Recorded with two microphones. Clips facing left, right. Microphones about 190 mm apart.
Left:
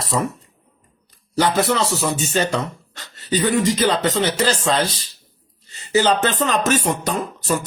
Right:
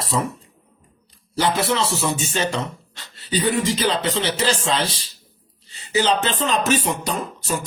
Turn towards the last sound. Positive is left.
turn(degrees=50)  # may be behind; listen again after turning